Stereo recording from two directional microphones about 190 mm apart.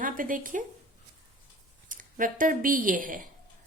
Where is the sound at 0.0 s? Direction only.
45° right (ahead or behind).